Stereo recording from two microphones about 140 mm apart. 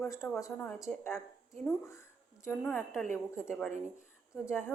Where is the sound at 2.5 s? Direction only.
15° left (ahead or behind).